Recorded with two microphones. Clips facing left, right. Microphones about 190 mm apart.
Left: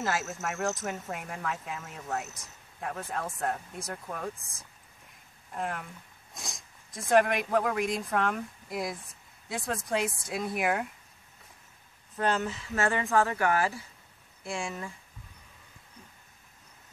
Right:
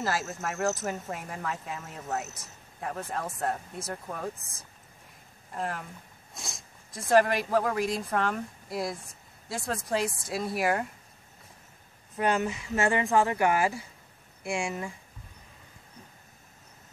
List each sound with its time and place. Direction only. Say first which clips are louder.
0.0 s speech: right 1 dB; centre (ahead or behind)
5.5 s speech: right 1 dB; centre (ahead or behind)
12.2 s speech: right 2 dB; 10° right (ahead or behind)